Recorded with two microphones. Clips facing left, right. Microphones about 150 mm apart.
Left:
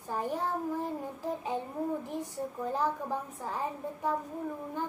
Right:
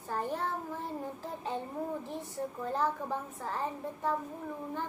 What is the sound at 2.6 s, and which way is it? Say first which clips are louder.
A woman's voice: left 1 dB; 15° left (ahead or behind).